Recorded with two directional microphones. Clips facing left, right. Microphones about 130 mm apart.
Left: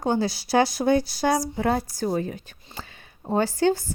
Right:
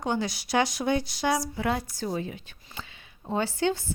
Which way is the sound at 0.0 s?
35° left (ahead or behind).